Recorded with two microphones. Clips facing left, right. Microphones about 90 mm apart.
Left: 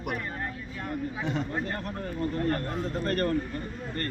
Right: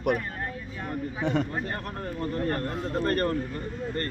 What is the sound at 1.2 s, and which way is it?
Speech, 55° right (ahead or behind).